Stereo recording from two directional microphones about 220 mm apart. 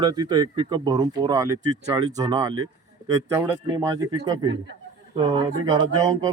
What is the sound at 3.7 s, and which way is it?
Speech, 20° right (ahead or behind).